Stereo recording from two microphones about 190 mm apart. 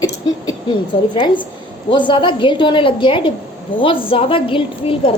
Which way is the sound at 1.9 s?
25° left (ahead or behind).